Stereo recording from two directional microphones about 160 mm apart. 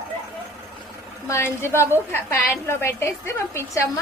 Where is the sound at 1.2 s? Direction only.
15° left (ahead or behind).